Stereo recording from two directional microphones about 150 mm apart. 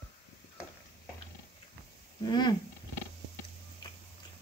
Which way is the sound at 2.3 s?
30° left (ahead or behind).